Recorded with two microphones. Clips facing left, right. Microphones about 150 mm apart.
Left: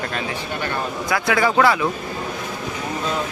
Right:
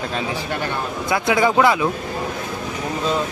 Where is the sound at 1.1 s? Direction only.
20° right (ahead or behind).